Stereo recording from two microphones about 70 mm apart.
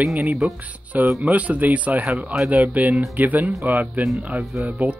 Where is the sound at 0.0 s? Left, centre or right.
Centre.